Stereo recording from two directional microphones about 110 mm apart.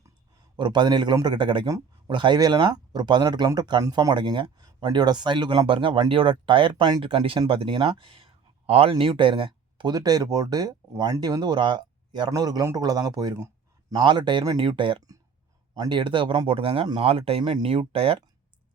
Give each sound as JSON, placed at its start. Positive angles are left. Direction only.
{"t": 0.5, "sound": "a man's voice", "side_deg": -45}
{"t": 16.5, "sound": "speech", "side_deg": -60}